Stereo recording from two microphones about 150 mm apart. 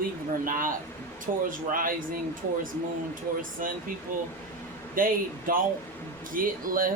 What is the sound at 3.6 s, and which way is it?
Speech, 65° right (ahead or behind).